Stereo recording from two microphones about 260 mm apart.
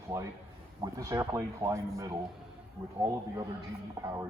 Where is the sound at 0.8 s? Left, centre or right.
Centre.